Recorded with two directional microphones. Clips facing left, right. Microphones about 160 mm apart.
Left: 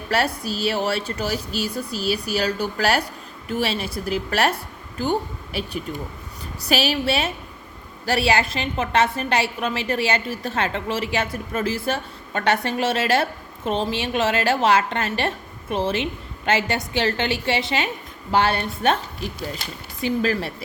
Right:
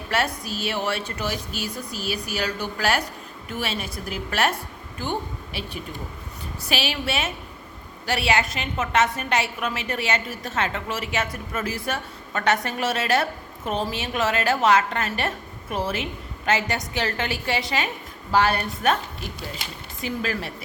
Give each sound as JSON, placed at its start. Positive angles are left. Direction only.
{"t": 0.1, "sound": "a woman's voice", "side_deg": 35}
{"t": 5.5, "sound": "a woman's voice", "side_deg": 40}
{"t": 20.0, "sound": "a woman's voice", "side_deg": 35}